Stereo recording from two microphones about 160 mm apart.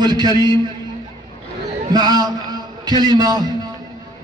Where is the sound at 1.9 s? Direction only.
25° right (ahead or behind).